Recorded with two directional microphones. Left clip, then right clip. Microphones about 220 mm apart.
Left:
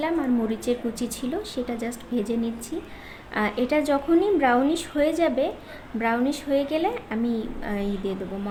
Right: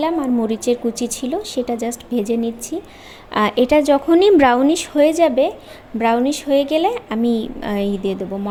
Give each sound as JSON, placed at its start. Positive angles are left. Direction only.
{"t": 0.0, "sound": "a woman's voice", "side_deg": -25}
{"t": 4.2, "sound": "a woman's voice", "side_deg": -40}